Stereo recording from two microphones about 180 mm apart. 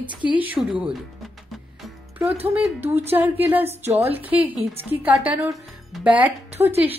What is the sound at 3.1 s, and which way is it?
Speech, 10° right (ahead or behind).